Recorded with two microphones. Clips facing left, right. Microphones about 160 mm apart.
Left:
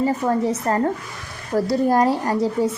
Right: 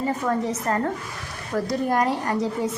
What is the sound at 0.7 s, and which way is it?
A woman's voice, 35° left (ahead or behind).